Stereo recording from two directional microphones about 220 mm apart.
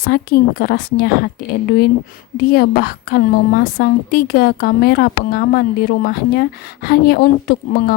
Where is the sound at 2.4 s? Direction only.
45° left (ahead or behind).